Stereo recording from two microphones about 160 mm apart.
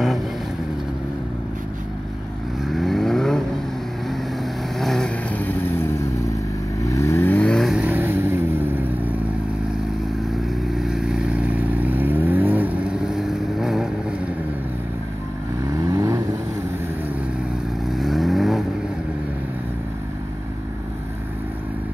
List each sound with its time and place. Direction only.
2.6 s vehicle: centre (ahead or behind)
4.7 s vehicle: 5° left (ahead or behind)
10.8 s vehicle: 5° right (ahead or behind)
15.6 s vehicle: 20° right (ahead or behind)
17.8 s vehicle: centre (ahead or behind)